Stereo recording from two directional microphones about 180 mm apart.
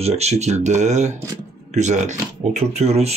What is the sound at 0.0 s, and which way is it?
Speech, 35° right (ahead or behind).